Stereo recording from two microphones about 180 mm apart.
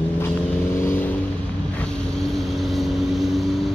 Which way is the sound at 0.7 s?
10° left (ahead or behind).